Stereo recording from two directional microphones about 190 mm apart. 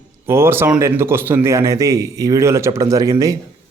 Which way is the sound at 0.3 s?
15° right (ahead or behind).